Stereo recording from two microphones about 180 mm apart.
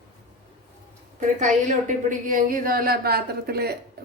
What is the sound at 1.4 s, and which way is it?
A woman's voice, 45° right (ahead or behind).